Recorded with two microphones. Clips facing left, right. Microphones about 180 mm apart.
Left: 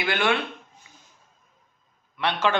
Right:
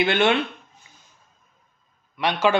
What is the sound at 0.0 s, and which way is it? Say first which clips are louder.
Speech: right 5 dB; 25° right (ahead or behind).